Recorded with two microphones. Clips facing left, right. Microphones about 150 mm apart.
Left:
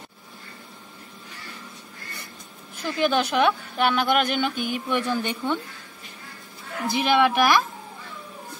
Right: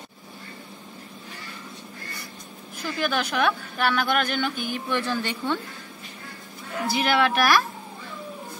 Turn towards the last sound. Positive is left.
turn(degrees=15)  # may be behind; listen again after turning